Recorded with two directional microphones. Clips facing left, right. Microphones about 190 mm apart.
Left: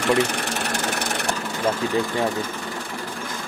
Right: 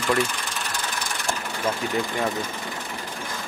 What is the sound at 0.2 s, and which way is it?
Engine, 70° left (ahead or behind).